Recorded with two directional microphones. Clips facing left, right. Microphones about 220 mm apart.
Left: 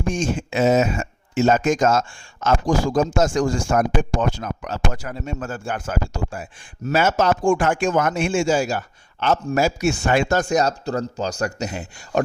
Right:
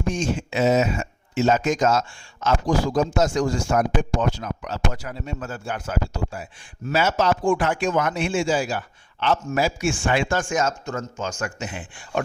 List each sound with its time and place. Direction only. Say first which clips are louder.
0.1 s a man's voice: left 2 dB; 50° left (ahead or behind)